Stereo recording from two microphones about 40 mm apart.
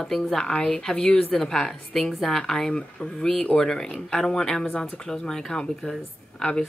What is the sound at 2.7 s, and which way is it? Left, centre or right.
Speech, left.